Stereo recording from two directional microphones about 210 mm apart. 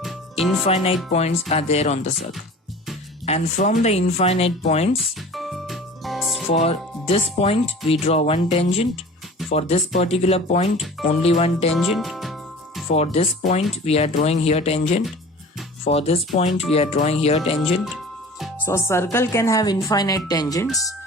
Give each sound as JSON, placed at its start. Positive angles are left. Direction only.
{"t": 0.6, "sound": "speech", "side_deg": 30}
{"t": 3.2, "sound": "speech", "side_deg": 30}
{"t": 4.9, "sound": "music", "side_deg": 0}
{"t": 6.5, "sound": "speech", "side_deg": 30}
{"t": 11.7, "sound": "speech", "side_deg": 0}
{"t": 12.9, "sound": "speech", "side_deg": 30}
{"t": 17.8, "sound": "music", "side_deg": 0}
{"t": 18.6, "sound": "speech", "side_deg": 10}
{"t": 20.7, "sound": "speech", "side_deg": 0}